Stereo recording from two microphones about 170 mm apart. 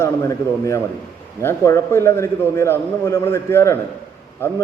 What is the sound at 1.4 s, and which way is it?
A man's voice, 15° left (ahead or behind).